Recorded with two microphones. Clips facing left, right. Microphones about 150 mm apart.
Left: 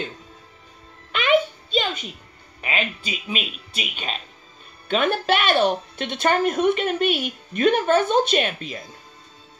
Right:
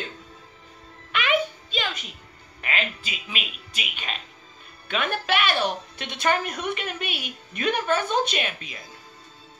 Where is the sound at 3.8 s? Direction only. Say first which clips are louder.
Left 4 dB; 30° left (ahead or behind).